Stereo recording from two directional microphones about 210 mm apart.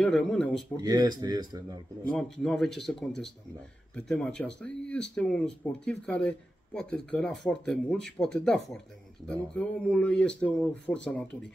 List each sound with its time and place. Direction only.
0.0 s speech: 5° left (ahead or behind)
0.7 s speech: 20° right (ahead or behind)
2.0 s speech: 5° left (ahead or behind)